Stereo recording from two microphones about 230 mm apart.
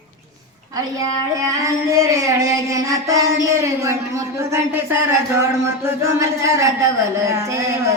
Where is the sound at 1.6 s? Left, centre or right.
Centre.